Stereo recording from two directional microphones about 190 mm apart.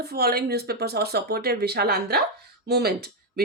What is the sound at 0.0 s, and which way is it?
Speech, 55° right (ahead or behind).